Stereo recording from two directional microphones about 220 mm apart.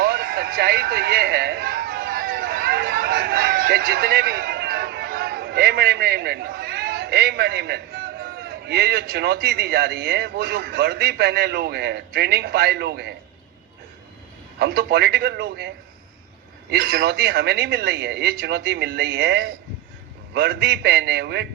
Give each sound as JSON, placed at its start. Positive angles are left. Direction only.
{"t": 0.0, "sound": "speech", "side_deg": -40}
{"t": 14.6, "sound": "speech", "side_deg": -45}
{"t": 16.7, "sound": "speech", "side_deg": -45}